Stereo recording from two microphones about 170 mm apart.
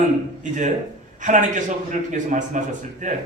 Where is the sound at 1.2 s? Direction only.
50° right (ahead or behind).